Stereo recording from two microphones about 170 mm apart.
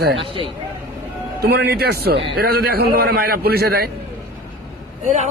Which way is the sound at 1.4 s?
70° right (ahead or behind).